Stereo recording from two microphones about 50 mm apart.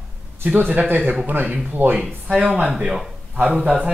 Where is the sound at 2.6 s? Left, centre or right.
Centre.